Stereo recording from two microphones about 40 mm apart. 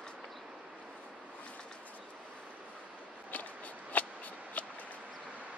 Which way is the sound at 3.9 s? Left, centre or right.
Left.